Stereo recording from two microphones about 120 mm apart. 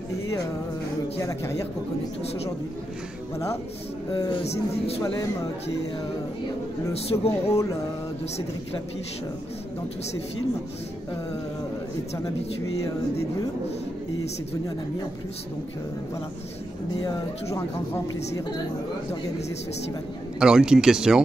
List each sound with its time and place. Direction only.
1.2 s speech: 20° left (ahead or behind)
6.9 s speech: 60° left (ahead or behind)
17.0 s speech: 25° left (ahead or behind)
20.3 s speech: 5° right (ahead or behind)